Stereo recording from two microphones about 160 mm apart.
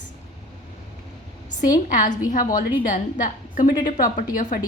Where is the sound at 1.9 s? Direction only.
55° left (ahead or behind).